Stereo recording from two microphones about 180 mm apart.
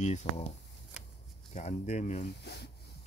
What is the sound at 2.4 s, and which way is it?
Speech, 65° left (ahead or behind).